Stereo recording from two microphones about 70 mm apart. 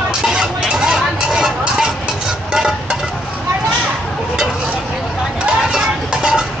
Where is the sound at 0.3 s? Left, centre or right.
Centre.